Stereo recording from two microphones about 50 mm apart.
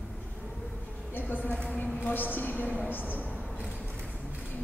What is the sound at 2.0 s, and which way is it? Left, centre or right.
A woman's voice, left.